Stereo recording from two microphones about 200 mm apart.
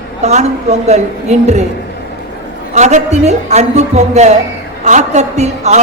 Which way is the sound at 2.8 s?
35° right (ahead or behind).